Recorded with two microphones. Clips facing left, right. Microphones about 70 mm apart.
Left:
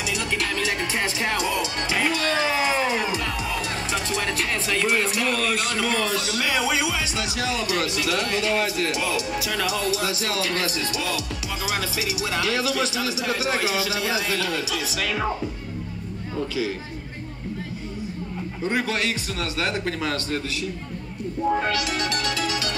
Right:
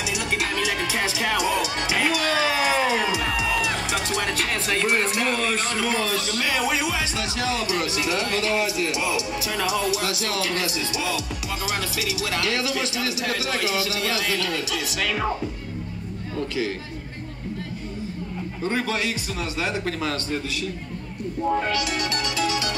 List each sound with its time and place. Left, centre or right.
1.4 s music: right
2.1 s a sound: centre
3.3 s music: right
4.6 s speech: right
5.4 s a man's voice: centre
6.2 s speech: centre
7.5 s speech: centre
10.2 s a man's voice: left
12.0 s a man's voice: left
15.0 s a man's voice: centre
18.6 s a man's voice: centre
19.8 s a man's voice: centre
21.5 s a man's voice: centre